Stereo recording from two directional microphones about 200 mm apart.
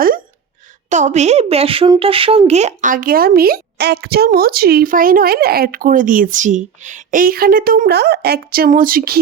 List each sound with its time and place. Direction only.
0.9 s a woman's voice: 35° right (ahead or behind)